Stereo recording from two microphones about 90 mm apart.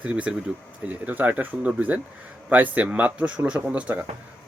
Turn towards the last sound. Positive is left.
turn(degrees=-15)  # may be behind; listen again after turning